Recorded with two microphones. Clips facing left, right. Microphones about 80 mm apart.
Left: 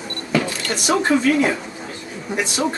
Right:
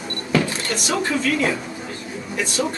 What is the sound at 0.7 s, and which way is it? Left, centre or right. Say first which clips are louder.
Speech: left 7 dB; left.